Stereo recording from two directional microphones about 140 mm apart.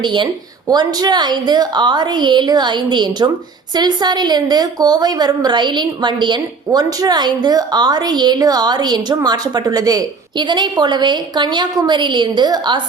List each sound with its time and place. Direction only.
0.0 s a woman's voice: 35° right (ahead or behind)